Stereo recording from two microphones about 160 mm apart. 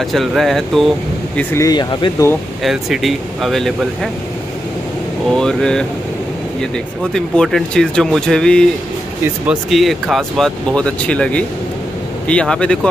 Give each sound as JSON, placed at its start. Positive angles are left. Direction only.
{"t": 0.0, "sound": "speech", "side_deg": 0}
{"t": 1.5, "sound": "speech", "side_deg": 20}
{"t": 2.6, "sound": "speech", "side_deg": 0}
{"t": 5.3, "sound": "speech", "side_deg": 5}